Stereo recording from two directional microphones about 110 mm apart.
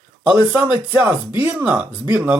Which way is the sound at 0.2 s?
10° right (ahead or behind).